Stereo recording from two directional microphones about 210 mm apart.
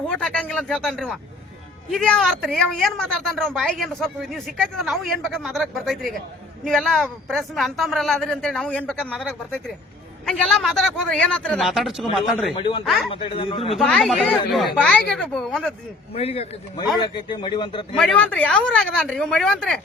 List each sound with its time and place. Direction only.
0.1 s a man's voice: 5° left (ahead or behind)
12.5 s speech: 25° left (ahead or behind)
12.8 s a man's voice: centre (ahead or behind)
13.1 s speech: 25° left (ahead or behind)
13.7 s a man's voice: centre (ahead or behind)
16.1 s speech: 30° left (ahead or behind)
17.9 s a man's voice: 5° left (ahead or behind)